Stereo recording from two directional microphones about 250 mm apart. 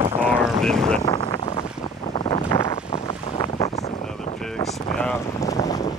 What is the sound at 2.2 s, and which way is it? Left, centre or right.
Wind, centre.